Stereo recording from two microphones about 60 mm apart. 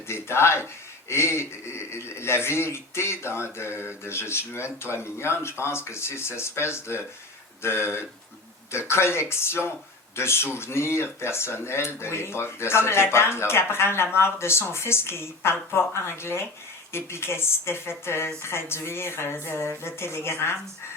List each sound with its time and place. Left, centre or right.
0.1 s speech: left